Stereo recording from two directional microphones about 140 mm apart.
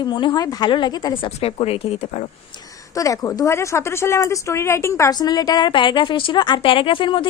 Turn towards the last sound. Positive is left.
turn(degrees=35)  # may be behind; listen again after turning